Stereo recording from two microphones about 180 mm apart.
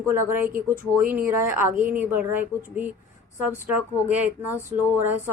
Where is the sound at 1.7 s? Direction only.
45° right (ahead or behind).